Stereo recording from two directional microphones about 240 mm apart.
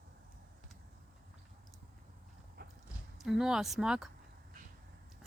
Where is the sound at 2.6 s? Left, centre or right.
Right.